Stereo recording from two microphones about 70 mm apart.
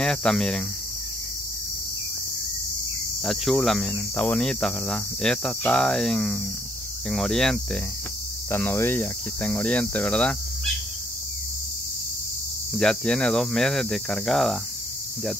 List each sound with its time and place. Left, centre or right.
0.0 s speech: centre
3.3 s speech: centre
8.5 s cricket: left
9.0 s speech: centre
12.7 s speech: centre